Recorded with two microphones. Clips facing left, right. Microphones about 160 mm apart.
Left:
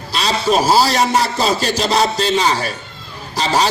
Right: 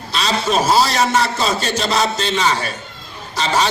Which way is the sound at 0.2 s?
35° left (ahead or behind).